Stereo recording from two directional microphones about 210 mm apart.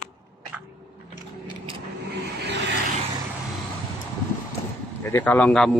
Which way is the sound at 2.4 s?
55° right (ahead or behind).